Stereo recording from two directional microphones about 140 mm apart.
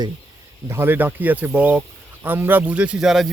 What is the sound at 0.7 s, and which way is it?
Speech, 15° right (ahead or behind).